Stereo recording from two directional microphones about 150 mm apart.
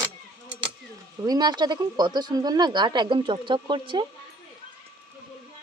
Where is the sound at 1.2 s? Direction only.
25° right (ahead or behind).